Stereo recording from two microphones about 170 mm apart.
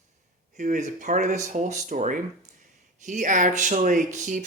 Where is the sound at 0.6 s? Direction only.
45° right (ahead or behind).